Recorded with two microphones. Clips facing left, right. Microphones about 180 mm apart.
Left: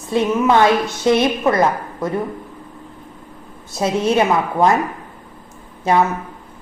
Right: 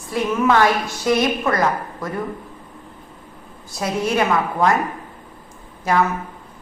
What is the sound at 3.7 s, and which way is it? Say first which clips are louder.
Speech: left 4 dB; 25° left (ahead or behind).